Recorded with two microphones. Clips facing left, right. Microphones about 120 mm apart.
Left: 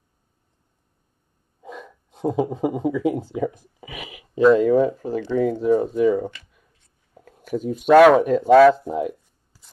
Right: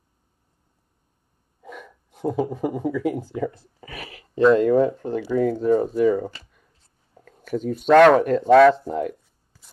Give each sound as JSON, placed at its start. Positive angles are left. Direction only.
{"t": 1.6, "sound": "speech", "side_deg": 20}